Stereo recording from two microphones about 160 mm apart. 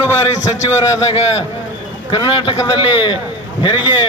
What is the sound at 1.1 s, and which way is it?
A man's voice, 40° left (ahead or behind).